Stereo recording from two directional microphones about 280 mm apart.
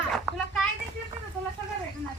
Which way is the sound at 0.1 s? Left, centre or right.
Centre.